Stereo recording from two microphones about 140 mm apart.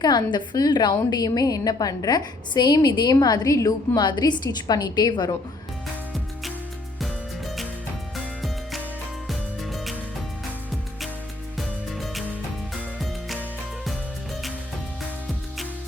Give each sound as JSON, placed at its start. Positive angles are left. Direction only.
{"t": 0.0, "sound": "a woman's voice", "side_deg": 30}
{"t": 7.0, "sound": "music", "side_deg": 0}
{"t": 11.5, "sound": "music", "side_deg": 0}